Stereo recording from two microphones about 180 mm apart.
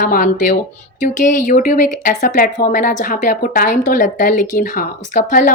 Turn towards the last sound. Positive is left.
turn(degrees=45)  # may be behind; listen again after turning